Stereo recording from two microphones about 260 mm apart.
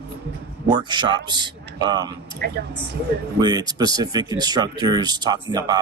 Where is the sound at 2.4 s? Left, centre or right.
Right.